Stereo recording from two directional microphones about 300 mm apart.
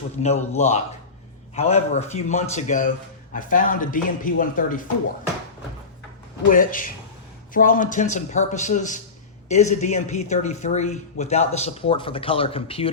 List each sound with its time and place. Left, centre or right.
0.2 s a man's voice: left
6.5 s a man's voice: left